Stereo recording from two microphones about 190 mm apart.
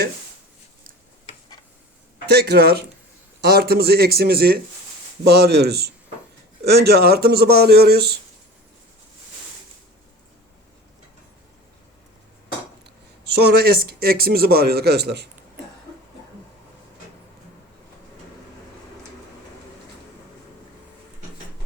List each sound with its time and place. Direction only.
2.2 s speech: 60° right (ahead or behind)
12.8 s speech: 60° right (ahead or behind)